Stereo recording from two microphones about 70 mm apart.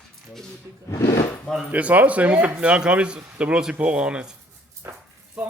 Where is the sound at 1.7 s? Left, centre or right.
Centre.